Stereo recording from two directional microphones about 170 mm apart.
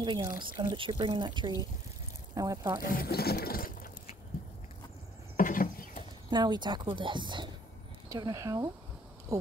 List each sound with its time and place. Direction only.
0.0 s speech: 25° right (ahead or behind)
2.8 s speech: 60° left (ahead or behind)
5.4 s patter: 55° left (ahead or behind)
6.3 s speech: 25° right (ahead or behind)